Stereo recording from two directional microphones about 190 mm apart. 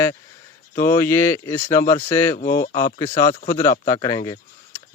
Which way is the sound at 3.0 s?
15° left (ahead or behind).